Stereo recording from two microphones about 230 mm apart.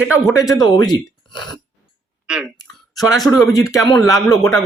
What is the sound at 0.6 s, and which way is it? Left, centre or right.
Speech, centre.